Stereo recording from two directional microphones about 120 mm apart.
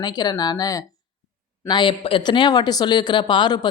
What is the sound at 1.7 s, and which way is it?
Speech, 45° left (ahead or behind).